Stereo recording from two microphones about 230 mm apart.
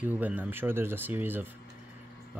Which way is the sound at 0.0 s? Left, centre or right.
Centre.